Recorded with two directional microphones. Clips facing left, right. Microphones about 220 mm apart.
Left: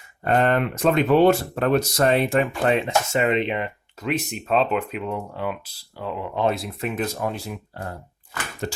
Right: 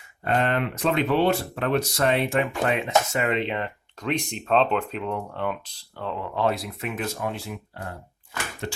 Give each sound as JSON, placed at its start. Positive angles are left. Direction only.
{"t": 0.3, "sound": "speech", "side_deg": 45}
{"t": 4.0, "sound": "speech", "side_deg": 5}